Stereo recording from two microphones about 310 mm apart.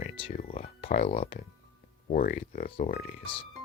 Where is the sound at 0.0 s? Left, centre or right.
Centre.